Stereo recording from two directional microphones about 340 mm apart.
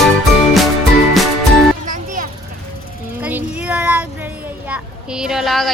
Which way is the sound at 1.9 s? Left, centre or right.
Right.